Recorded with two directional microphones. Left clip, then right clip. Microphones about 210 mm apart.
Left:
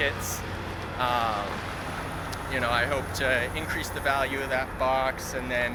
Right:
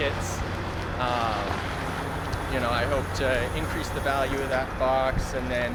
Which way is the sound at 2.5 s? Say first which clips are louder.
Even; centre (ahead or behind).